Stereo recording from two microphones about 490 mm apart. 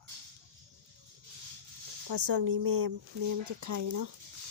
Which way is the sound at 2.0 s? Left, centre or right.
Right.